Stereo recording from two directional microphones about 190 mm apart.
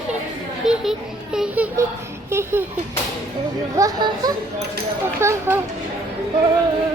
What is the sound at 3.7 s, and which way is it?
Speech, 20° right (ahead or behind).